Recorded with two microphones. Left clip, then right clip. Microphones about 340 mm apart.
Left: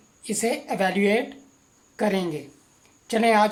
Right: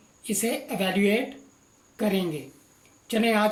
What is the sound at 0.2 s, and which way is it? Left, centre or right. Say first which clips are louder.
Speech: left 3 dB; centre.